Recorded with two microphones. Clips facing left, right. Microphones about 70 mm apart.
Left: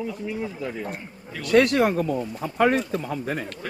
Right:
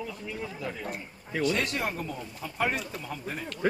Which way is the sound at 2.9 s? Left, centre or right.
Left.